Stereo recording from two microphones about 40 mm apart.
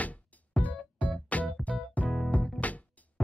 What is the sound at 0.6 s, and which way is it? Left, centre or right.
Music, left.